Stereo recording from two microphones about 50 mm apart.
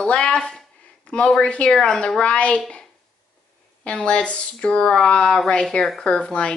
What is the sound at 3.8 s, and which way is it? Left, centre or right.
A woman's voice, left.